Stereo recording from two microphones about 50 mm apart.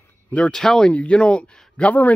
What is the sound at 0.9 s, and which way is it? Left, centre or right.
Speech, left.